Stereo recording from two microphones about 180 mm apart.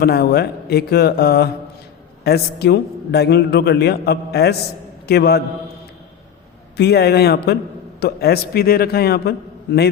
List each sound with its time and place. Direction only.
0.0 s a man's voice: 60° left (ahead or behind)
6.7 s a man's voice: 65° left (ahead or behind)